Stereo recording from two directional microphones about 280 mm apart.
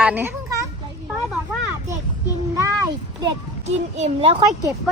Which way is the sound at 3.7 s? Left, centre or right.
Right.